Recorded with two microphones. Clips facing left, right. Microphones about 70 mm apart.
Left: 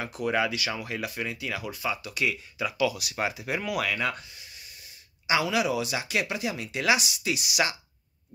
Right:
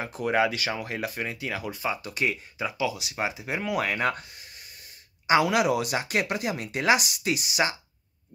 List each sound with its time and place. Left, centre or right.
0.1 s speech: right
2.8 s speech: right